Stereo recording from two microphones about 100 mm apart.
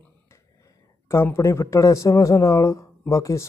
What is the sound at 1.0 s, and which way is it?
Speech, 25° left (ahead or behind).